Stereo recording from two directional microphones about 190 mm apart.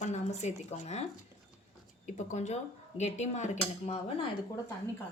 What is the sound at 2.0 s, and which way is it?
Speech, 40° left (ahead or behind).